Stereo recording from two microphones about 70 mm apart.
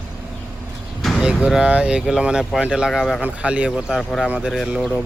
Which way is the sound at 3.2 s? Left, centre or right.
Centre.